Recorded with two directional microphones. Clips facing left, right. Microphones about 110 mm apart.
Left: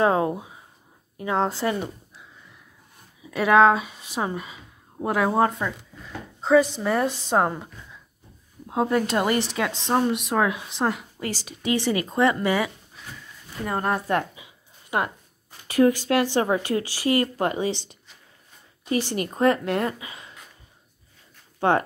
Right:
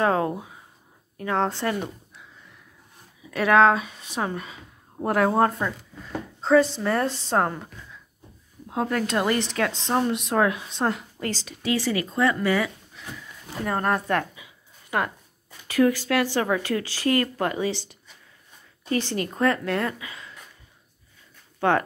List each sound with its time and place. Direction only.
0.0 s speech: 20° left (ahead or behind)
3.3 s speech: 15° left (ahead or behind)
14.3 s a sound: 25° left (ahead or behind)
15.7 s speech: 20° left (ahead or behind)
21.5 s speech: 25° left (ahead or behind)